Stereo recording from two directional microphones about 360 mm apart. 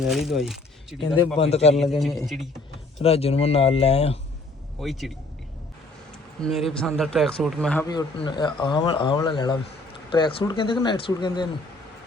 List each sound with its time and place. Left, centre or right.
0.0 s speech: centre
1.4 s speech: centre
1.7 s speech: centre
3.0 s speech: centre
4.8 s speech: centre
6.4 s speech: centre